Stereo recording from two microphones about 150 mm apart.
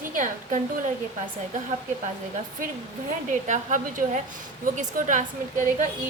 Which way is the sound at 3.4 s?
55° right (ahead or behind).